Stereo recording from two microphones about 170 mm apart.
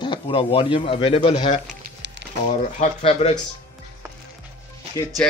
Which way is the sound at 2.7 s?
40° left (ahead or behind).